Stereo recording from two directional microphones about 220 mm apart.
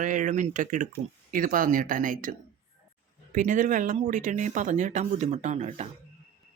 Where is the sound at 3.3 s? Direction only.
35° right (ahead or behind).